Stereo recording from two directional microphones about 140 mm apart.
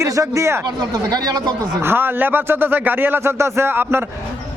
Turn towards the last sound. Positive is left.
turn(degrees=-15)  # may be behind; listen again after turning